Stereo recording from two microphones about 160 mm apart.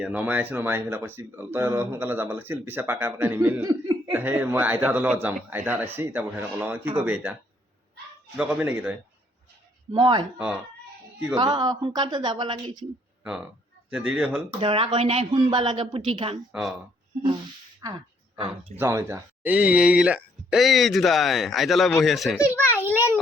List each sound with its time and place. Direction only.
0.0 s speech: 10° right (ahead or behind)
4.2 s speech: 10° right (ahead or behind)
8.4 s speech: 10° right (ahead or behind)
9.9 s speech: 30° right (ahead or behind)
11.3 s speech: 25° right (ahead or behind)
13.2 s speech: 5° right (ahead or behind)
14.6 s speech: 35° right (ahead or behind)
16.5 s speech: centre (ahead or behind)
17.8 s speech: 20° right (ahead or behind); by 22.4 s centre (ahead or behind)
22.4 s a child's voice: 15° left (ahead or behind)